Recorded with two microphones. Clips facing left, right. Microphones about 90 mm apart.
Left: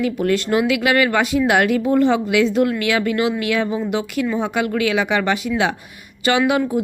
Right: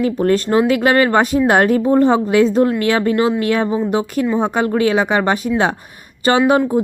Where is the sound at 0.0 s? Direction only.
40° right (ahead or behind).